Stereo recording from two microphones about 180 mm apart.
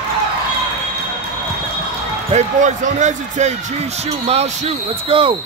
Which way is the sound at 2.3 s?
40° right (ahead or behind).